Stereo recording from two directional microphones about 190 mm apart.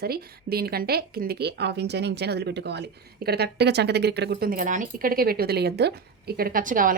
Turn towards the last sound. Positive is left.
turn(degrees=-45)  # may be behind; listen again after turning